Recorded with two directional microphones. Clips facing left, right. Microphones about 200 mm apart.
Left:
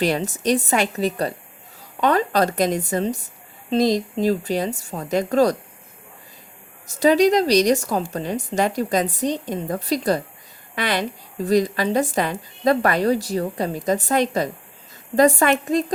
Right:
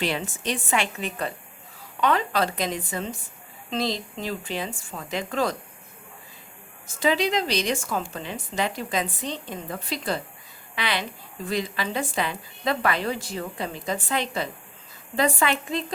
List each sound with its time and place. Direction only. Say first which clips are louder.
0.0 s a woman's voice: left 7 dB; 40° left (ahead or behind)
6.8 s a woman's voice: left 8 dB; 40° left (ahead or behind)